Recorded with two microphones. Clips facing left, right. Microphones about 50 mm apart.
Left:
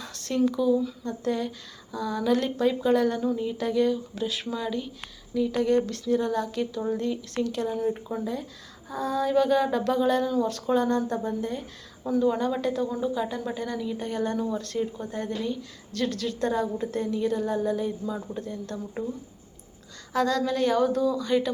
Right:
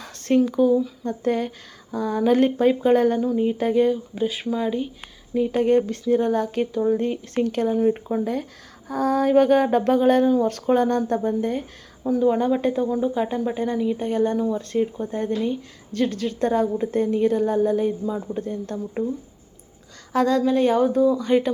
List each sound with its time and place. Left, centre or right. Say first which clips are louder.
0.0 s speech: right 6 dB; right
5.3 s speech: right 5 dB; right
8.9 s a sound: right 6 dB; right
10.4 s speech: right 5 dB; right
12.2 s speech: right 6 dB; right
20.1 s speech: right 5 dB; right